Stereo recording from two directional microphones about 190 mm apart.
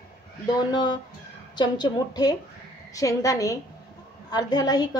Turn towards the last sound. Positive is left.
turn(degrees=20)  # may be behind; listen again after turning